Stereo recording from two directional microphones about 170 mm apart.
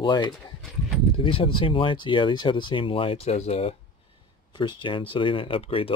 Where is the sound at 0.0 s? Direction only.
25° left (ahead or behind).